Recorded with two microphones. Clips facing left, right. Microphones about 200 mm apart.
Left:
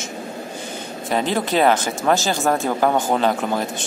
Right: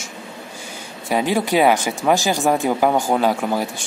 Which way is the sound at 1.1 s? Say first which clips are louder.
Right 2 dB; 10° right (ahead or behind).